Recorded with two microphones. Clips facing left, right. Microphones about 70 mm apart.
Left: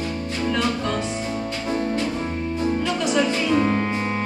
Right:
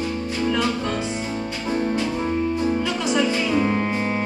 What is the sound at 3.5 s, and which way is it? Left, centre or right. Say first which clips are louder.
Music: left 1 dB; centre.